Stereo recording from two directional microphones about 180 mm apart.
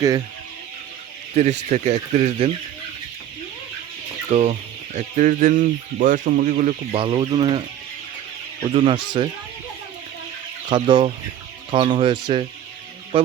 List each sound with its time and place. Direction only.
1.4 s speech: 40° right (ahead or behind)
4.3 s speech: 40° right (ahead or behind)
6.9 s speech: 30° right (ahead or behind)
8.6 s speech: 30° right (ahead or behind)
10.7 s speech: 25° right (ahead or behind)